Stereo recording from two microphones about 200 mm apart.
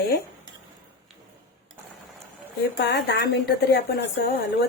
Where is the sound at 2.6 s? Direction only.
60° left (ahead or behind).